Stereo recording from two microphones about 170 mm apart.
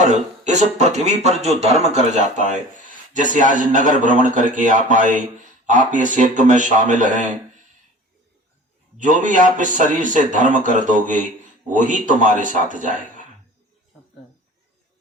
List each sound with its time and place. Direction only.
0.0 s a man's voice: 45° right (ahead or behind)
9.0 s a man's voice: 50° right (ahead or behind)